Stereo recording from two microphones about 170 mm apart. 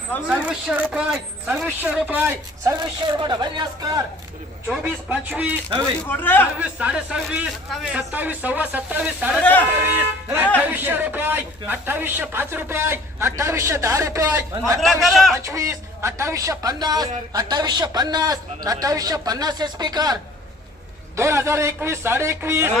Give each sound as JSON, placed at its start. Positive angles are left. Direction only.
{"t": 0.3, "sound": "a man's voice", "side_deg": -10}
{"t": 2.8, "sound": "a man's voice", "side_deg": -25}
{"t": 4.8, "sound": "a man's voice", "side_deg": -10}
{"t": 6.1, "sound": "a man's voice", "side_deg": 10}
{"t": 6.6, "sound": "a man's voice", "side_deg": -5}
{"t": 9.4, "sound": "a man's voice", "side_deg": 10}
{"t": 10.6, "sound": "a man's voice", "side_deg": -10}
{"t": 15.0, "sound": "a man's voice", "side_deg": 0}
{"t": 15.4, "sound": "a man's voice", "side_deg": -20}
{"t": 21.2, "sound": "a man's voice", "side_deg": -15}